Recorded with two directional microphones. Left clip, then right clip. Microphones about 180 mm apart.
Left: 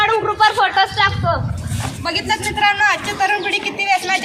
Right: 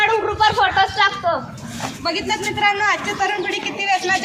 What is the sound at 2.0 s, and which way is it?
A woman's voice, 35° left (ahead or behind).